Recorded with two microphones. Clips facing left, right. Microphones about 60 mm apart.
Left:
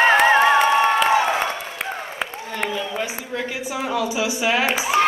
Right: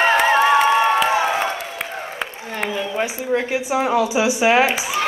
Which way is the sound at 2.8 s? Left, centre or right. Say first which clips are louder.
Right 4 dB; right.